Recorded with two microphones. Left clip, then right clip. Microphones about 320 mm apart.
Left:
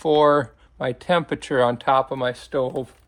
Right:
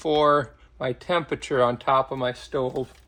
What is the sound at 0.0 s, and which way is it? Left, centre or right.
Speech, left.